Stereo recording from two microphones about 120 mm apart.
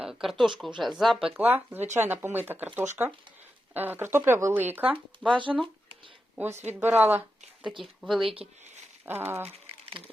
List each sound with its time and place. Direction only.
0.0 s speech: 5° right (ahead or behind)
1.4 s speech: 15° right (ahead or behind)
5.3 s speech: 45° right (ahead or behind)
6.7 s speech: 15° right (ahead or behind)
7.8 s speech: centre (ahead or behind)
9.0 s speech: 20° right (ahead or behind)